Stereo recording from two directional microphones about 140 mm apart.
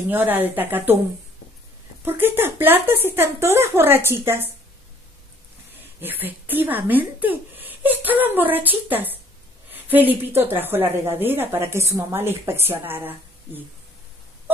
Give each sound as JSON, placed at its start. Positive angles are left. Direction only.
{"t": 0.1, "sound": "a woman's voice", "side_deg": -15}
{"t": 2.0, "sound": "a woman's voice", "side_deg": -15}
{"t": 5.9, "sound": "a woman's voice", "side_deg": -15}